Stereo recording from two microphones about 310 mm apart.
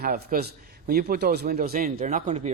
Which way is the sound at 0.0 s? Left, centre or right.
Right.